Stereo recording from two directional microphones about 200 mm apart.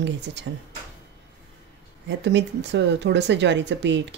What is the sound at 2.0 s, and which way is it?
Speech, 65° right (ahead or behind).